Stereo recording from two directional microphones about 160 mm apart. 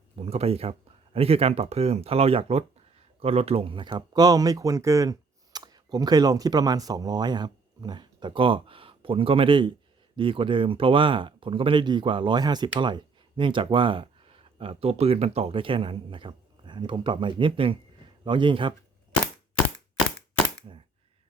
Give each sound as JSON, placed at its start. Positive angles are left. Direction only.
{"t": 0.2, "sound": "speech", "side_deg": -40}